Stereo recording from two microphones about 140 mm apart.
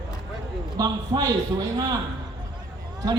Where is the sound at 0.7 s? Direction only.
30° right (ahead or behind).